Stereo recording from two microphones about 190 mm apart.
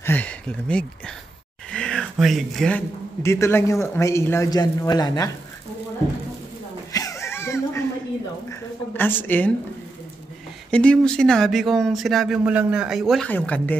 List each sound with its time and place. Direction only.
0.0 s speech: 10° left (ahead or behind)
1.7 s a sound: 5° left (ahead or behind)
3.2 s speech: 15° left (ahead or behind)
6.9 s a sound: 15° left (ahead or behind)
8.5 s a woman's voice: 10° left (ahead or behind)
10.7 s speech: 5° left (ahead or behind)